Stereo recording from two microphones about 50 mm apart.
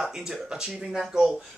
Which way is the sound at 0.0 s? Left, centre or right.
Centre.